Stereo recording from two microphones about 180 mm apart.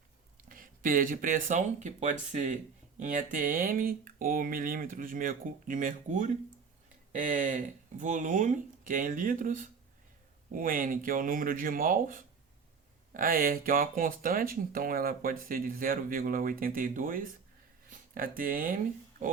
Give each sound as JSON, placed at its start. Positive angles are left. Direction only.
{"t": 0.4, "sound": "speech", "side_deg": -50}